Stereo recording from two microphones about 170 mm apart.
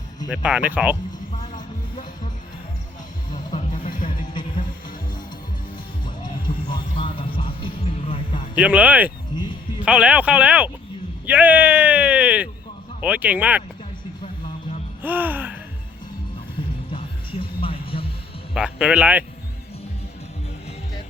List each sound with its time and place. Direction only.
0.3 s speech: 5° right (ahead or behind)
1.5 s music: 25° left (ahead or behind)
3.7 s music: 55° left (ahead or behind)
4.0 s music: 25° left (ahead or behind)
5.7 s music: 25° left (ahead or behind)
8.5 s speech: 10° right (ahead or behind)
9.3 s music: 25° left (ahead or behind)
9.8 s speech: 5° right (ahead or behind)
15.0 s music: 10° right (ahead or behind)
17.6 s music: 35° left (ahead or behind)
18.5 s speech: 5° right (ahead or behind)